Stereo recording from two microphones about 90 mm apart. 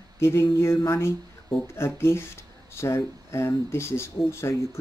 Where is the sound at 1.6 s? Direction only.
30° left (ahead or behind).